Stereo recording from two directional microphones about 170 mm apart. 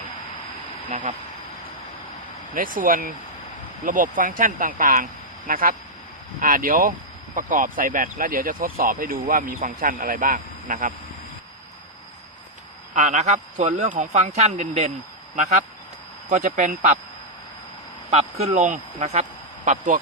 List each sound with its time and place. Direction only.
0.9 s speech: 50° right (ahead or behind)
2.6 s speech: 55° right (ahead or behind)
12.9 s speech: 45° right (ahead or behind)
18.1 s speech: 40° right (ahead or behind)